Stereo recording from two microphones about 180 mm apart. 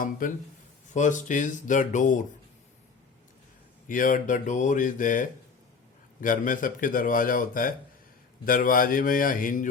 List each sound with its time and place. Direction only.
0.0 s speech: 50° left (ahead or behind)
3.8 s speech: 50° left (ahead or behind)